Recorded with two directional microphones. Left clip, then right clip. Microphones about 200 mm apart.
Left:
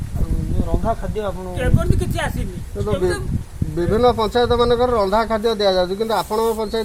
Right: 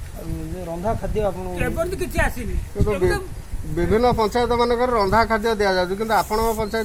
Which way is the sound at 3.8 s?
15° left (ahead or behind).